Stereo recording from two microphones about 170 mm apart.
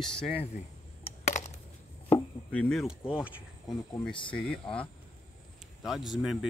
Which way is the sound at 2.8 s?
5° right (ahead or behind).